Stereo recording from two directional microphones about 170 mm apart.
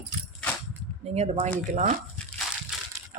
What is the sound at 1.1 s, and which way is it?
Speech, 40° right (ahead or behind).